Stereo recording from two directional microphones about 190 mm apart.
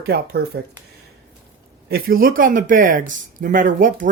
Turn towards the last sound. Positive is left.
turn(degrees=-45)  # may be behind; listen again after turning